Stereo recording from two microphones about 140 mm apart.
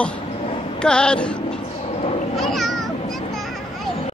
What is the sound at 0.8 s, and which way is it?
Speech, 5° left (ahead or behind).